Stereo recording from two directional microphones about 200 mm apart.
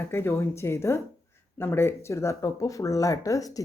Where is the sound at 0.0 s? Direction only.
10° left (ahead or behind).